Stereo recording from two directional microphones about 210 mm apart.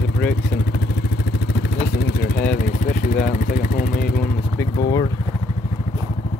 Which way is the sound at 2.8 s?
40° left (ahead or behind).